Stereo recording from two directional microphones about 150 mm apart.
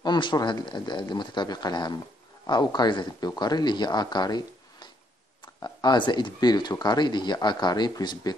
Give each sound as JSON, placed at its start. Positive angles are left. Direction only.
{"t": 0.0, "sound": "speech", "side_deg": 30}